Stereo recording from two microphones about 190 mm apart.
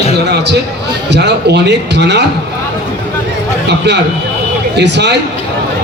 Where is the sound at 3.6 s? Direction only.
65° right (ahead or behind).